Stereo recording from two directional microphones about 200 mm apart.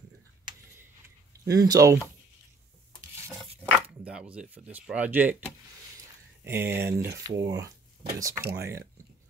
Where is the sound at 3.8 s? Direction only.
5° right (ahead or behind).